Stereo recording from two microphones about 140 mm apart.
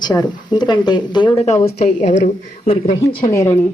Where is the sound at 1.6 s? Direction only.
70° left (ahead or behind).